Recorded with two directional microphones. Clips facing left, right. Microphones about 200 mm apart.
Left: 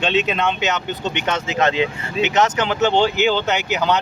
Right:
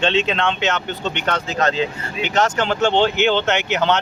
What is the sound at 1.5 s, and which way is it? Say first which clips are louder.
Speech: left 2 dB; 15° left (ahead or behind).